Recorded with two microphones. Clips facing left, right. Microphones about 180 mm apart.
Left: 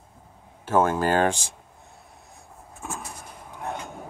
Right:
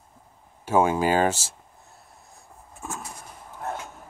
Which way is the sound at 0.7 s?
10° right (ahead or behind).